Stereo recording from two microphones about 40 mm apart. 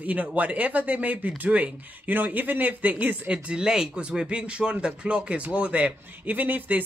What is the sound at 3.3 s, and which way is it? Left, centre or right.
Speech, right.